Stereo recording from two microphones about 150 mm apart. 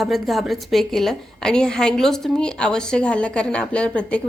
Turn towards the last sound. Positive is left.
turn(degrees=10)  # may be behind; listen again after turning